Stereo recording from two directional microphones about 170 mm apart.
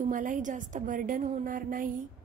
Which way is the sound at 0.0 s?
50° right (ahead or behind).